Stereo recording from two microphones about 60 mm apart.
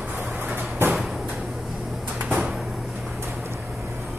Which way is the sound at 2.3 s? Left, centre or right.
Centre.